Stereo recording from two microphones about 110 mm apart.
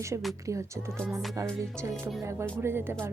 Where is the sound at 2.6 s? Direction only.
20° right (ahead or behind).